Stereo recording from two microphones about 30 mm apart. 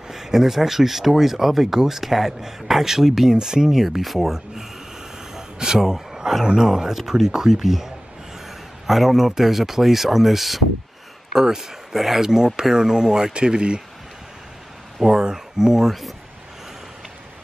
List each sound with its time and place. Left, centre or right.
0.1 s speech: centre
3.3 s speech: right
3.8 s speech: centre
5.3 s a sound: centre
6.4 s speech: right
6.7 s speech: centre
12.2 s speech: right
15.0 s speech: centre